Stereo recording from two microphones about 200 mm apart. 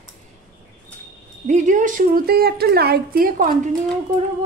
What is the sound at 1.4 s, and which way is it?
A woman's voice, 40° right (ahead or behind).